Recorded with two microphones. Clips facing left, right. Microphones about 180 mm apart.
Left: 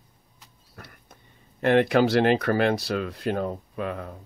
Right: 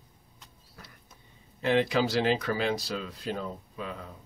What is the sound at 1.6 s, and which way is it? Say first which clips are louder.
Speech: left 6 dB; 60° left (ahead or behind).